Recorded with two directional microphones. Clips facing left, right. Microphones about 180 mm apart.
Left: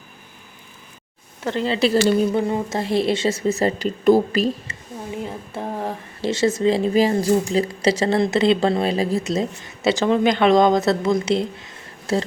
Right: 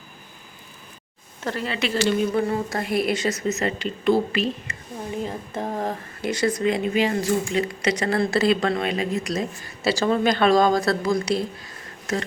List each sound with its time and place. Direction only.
1.4 s speech: 15° left (ahead or behind)
1.6 s a woman's voice: 30° left (ahead or behind)
2.3 s speech: 20° left (ahead or behind); by 4.5 s 40° left (ahead or behind)
5.2 s speech: 5° left (ahead or behind)
6.2 s speech: 25° left (ahead or behind)